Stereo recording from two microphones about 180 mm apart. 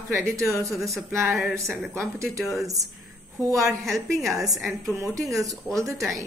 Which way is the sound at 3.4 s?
20° right (ahead or behind).